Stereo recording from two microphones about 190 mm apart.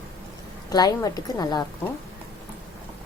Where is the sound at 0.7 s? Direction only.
20° left (ahead or behind).